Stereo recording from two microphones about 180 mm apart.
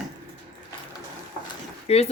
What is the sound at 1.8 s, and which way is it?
Speech, 35° left (ahead or behind).